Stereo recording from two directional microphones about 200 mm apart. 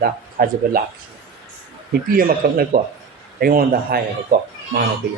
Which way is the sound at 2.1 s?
45° right (ahead or behind).